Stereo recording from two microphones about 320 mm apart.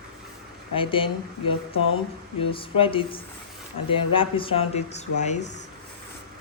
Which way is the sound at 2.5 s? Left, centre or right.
Centre.